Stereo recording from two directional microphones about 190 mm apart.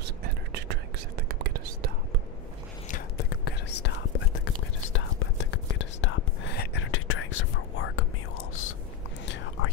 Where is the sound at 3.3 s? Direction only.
60° left (ahead or behind).